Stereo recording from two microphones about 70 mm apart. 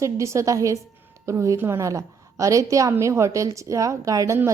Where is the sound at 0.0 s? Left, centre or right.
Right.